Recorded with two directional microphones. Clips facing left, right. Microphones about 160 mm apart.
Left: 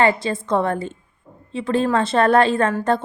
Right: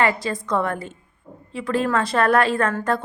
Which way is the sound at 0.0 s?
25° left (ahead or behind).